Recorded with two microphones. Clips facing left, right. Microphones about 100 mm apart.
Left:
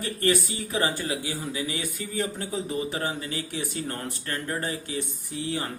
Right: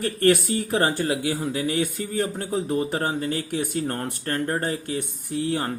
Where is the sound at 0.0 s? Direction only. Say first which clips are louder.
Right 5 dB; 55° right (ahead or behind).